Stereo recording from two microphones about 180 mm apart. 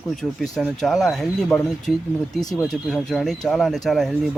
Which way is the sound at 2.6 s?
Centre (ahead or behind).